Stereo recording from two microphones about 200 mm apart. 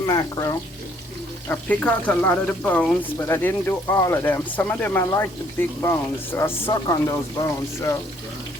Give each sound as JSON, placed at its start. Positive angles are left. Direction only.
{"t": 0.0, "sound": "speech", "side_deg": 20}
{"t": 1.5, "sound": "speech", "side_deg": 5}